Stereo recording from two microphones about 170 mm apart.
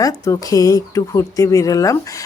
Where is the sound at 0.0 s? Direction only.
20° left (ahead or behind).